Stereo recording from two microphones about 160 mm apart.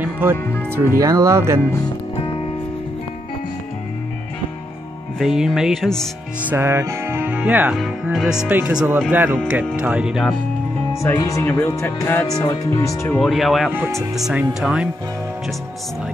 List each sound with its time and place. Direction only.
0.0 s speech: 15° right (ahead or behind)
2.1 s music: 30° left (ahead or behind)
5.2 s music: 5° right (ahead or behind)
6.4 s speech: 15° right (ahead or behind)
9.8 s music: 5° right (ahead or behind)
10.9 s speech: 15° left (ahead or behind)
13.2 s music: centre (ahead or behind)